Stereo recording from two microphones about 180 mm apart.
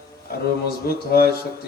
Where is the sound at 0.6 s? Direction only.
60° left (ahead or behind).